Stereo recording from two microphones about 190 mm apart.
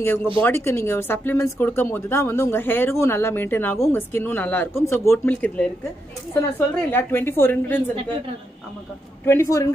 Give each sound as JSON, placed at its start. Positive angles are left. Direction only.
{"t": 0.0, "sound": "speech", "side_deg": 15}
{"t": 9.2, "sound": "speech", "side_deg": 15}